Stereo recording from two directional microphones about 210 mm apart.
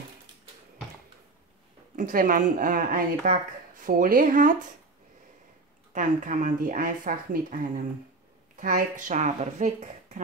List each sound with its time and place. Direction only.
2.0 s speech: 40° right (ahead or behind)
5.9 s speech: 40° right (ahead or behind)